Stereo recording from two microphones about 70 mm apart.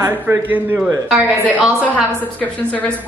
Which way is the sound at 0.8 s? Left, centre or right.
Centre.